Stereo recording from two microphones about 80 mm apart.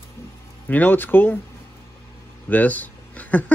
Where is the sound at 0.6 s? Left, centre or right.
Left.